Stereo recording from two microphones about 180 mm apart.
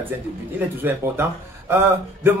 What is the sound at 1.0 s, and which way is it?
Speech, 15° right (ahead or behind).